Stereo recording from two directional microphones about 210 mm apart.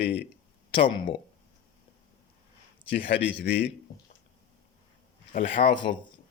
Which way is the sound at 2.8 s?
50° left (ahead or behind).